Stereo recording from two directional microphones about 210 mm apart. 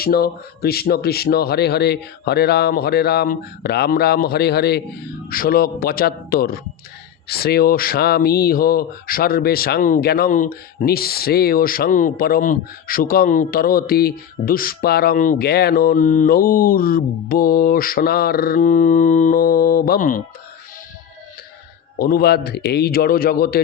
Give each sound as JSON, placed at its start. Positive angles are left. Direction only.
{"t": 0.0, "sound": "speech", "side_deg": 45}
{"t": 21.9, "sound": "speech", "side_deg": 45}